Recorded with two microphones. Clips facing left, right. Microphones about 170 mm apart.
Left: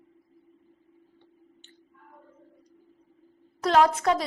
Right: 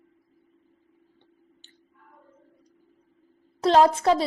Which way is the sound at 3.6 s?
30° right (ahead or behind).